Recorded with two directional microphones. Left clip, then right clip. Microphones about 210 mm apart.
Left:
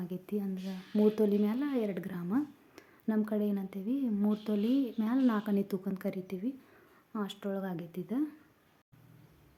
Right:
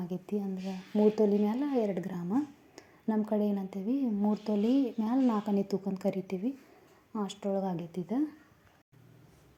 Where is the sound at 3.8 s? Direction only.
25° left (ahead or behind).